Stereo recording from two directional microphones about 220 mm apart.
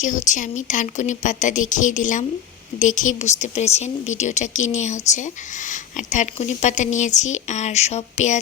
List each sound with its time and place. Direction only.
0.0 s speech: 35° left (ahead or behind)